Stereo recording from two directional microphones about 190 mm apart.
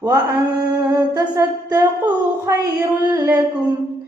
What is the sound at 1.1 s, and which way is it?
Female singing, 15° right (ahead or behind).